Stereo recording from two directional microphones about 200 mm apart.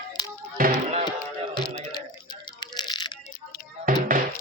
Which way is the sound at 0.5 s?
45° right (ahead or behind).